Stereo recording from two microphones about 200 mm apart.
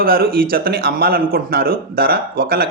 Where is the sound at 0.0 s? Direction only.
50° right (ahead or behind).